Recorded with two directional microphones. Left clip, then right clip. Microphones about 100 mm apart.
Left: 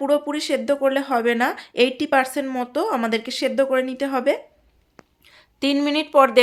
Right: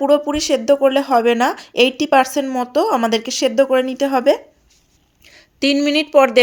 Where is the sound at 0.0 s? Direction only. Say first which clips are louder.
Right 6 dB; 30° right (ahead or behind).